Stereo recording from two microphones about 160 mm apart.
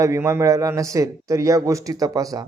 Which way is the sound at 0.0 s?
20° right (ahead or behind).